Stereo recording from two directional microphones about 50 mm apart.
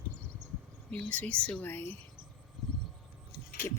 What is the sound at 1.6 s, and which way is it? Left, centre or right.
Speech, left.